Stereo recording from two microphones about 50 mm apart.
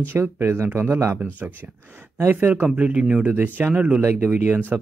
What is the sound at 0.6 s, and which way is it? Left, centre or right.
Speech, right.